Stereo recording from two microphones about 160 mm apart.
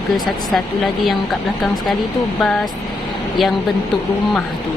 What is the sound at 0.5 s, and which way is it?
Speech, centre (ahead or behind).